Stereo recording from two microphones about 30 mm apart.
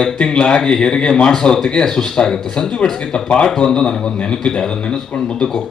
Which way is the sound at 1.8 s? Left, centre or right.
Left.